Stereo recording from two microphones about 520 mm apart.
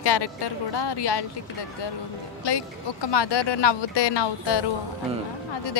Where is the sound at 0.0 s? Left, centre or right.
Left.